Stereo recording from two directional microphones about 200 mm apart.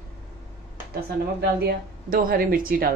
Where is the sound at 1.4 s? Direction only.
50° right (ahead or behind).